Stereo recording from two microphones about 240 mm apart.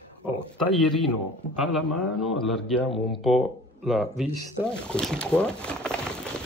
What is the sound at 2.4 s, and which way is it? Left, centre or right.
Speech, centre.